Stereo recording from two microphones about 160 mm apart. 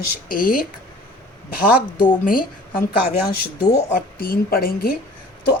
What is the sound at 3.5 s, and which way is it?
A woman's voice, 75° left (ahead or behind).